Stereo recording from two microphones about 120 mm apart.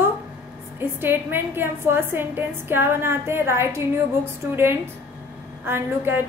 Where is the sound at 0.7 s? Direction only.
20° right (ahead or behind).